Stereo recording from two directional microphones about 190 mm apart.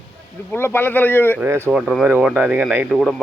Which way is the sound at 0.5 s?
10° left (ahead or behind).